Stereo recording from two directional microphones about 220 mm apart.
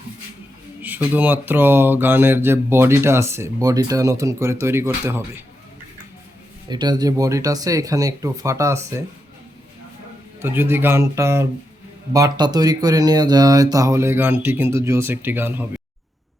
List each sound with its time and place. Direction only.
0.8 s speech: 10° right (ahead or behind)
6.7 s speech: 20° right (ahead or behind)
10.4 s speech: 10° right (ahead or behind)